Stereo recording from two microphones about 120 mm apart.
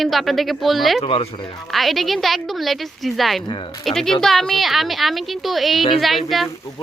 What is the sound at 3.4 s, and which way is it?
Speech, 45° left (ahead or behind).